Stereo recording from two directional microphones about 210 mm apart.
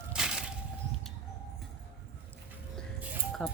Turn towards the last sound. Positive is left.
turn(degrees=0)  # may be behind; listen again after turning